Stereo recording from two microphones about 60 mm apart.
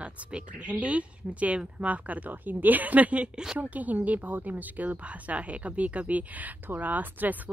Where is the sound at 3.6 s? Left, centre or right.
Right.